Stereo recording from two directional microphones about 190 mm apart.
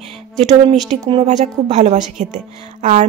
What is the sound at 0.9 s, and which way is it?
Speech, 35° right (ahead or behind).